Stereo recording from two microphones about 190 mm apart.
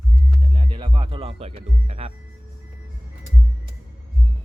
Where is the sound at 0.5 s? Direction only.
30° right (ahead or behind).